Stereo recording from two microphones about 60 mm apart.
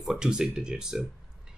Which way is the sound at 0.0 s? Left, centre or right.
Centre.